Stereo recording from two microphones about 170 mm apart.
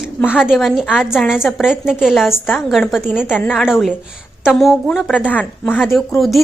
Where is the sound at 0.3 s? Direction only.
5° right (ahead or behind).